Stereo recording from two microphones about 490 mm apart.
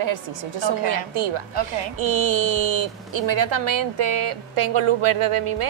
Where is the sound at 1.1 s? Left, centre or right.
Right.